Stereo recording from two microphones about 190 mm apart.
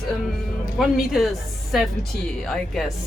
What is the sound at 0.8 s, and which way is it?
Speech, centre (ahead or behind).